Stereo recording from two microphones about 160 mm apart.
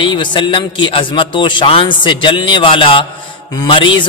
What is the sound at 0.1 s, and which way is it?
A man's voice, 30° left (ahead or behind).